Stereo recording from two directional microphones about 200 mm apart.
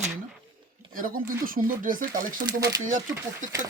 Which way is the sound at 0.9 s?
45° right (ahead or behind).